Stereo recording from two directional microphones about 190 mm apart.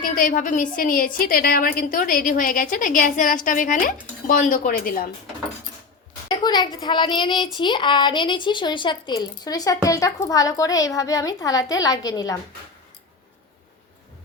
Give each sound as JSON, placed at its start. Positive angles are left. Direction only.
{"t": 0.0, "sound": "a woman's voice", "side_deg": 45}
{"t": 6.2, "sound": "a child's voice", "side_deg": 20}